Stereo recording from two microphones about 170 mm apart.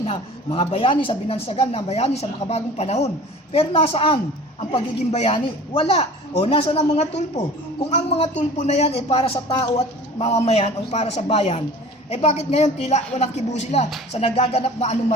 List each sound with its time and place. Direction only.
0.0 s speech: 35° left (ahead or behind)